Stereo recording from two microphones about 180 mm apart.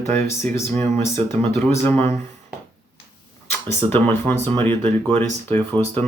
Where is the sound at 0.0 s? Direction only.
15° left (ahead or behind).